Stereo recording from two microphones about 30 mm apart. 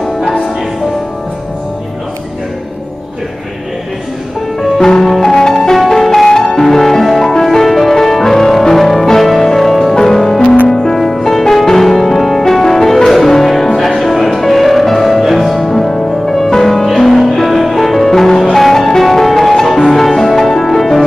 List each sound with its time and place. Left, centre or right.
4.6 s music: centre
11.0 s music: centre